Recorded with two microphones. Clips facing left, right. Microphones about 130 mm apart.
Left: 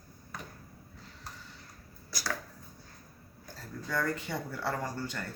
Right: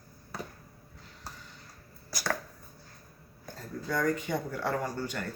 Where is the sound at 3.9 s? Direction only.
15° right (ahead or behind).